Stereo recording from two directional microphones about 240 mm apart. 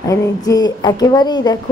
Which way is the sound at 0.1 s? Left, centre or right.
Centre.